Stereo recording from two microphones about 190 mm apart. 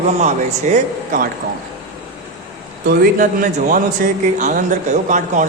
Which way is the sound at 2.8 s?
45° right (ahead or behind).